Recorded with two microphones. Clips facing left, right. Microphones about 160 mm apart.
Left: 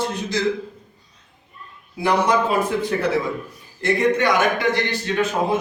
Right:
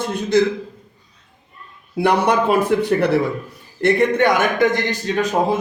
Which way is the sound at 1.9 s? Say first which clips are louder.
Right 2 dB; 65° right (ahead or behind).